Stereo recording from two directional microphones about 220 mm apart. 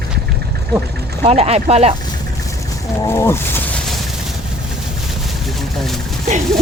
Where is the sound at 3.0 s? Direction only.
10° left (ahead or behind).